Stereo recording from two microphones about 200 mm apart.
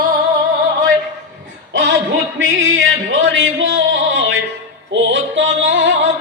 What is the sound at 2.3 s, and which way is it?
Music, 70° right (ahead or behind).